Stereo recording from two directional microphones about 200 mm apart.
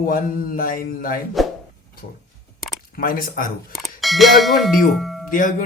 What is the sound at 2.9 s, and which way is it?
Speech, 45° left (ahead or behind).